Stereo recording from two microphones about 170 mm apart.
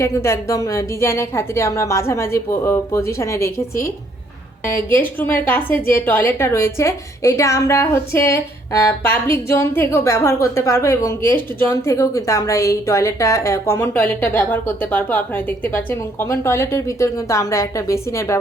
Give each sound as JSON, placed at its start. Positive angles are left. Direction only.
{"t": 0.0, "sound": "a woman's voice", "side_deg": 15}
{"t": 4.6, "sound": "a woman's voice", "side_deg": 15}